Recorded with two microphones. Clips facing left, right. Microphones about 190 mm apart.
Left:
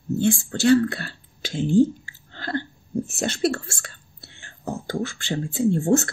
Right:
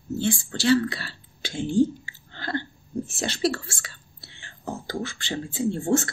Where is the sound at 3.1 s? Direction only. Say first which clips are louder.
Left 2 dB; 50° left (ahead or behind).